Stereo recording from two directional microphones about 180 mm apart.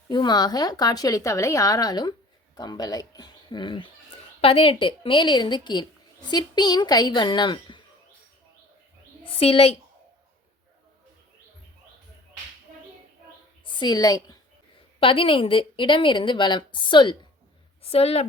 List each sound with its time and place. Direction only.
0.1 s a woman's voice: 25° left (ahead or behind)
9.4 s a woman's voice: 35° left (ahead or behind)
13.7 s a woman's voice: 25° left (ahead or behind)